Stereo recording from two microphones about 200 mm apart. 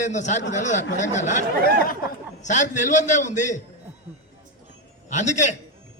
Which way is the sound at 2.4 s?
35° left (ahead or behind).